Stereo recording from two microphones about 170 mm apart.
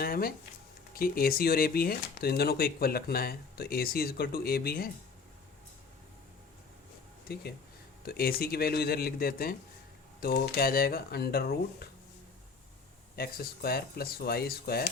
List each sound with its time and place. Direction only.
0.0 s speech: 60° left (ahead or behind)
7.3 s speech: 65° left (ahead or behind)
13.1 s speech: 65° left (ahead or behind)